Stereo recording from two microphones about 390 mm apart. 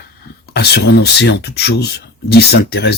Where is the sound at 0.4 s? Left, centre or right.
Left.